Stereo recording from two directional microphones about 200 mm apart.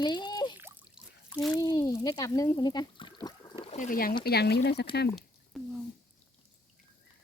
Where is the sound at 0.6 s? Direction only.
10° right (ahead or behind).